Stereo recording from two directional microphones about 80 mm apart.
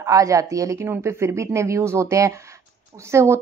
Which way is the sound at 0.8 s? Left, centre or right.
Right.